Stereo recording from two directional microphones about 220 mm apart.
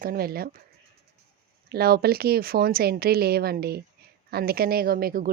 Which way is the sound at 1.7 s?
45° right (ahead or behind).